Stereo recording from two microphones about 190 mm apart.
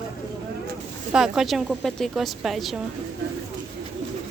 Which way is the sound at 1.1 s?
Centre (ahead or behind).